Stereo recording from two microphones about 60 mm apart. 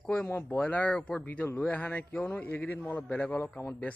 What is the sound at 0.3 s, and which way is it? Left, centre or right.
Speech, left.